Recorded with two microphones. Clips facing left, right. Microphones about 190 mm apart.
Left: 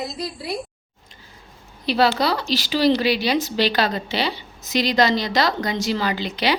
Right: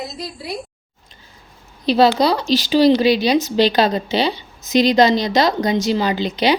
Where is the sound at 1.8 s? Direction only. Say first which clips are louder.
Right 5 dB; 20° right (ahead or behind).